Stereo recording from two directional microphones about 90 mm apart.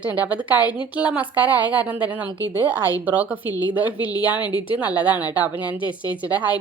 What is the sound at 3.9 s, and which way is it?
Speech, 50° left (ahead or behind).